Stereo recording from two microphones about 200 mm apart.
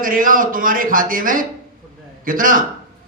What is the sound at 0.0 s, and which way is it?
Speech, 45° right (ahead or behind).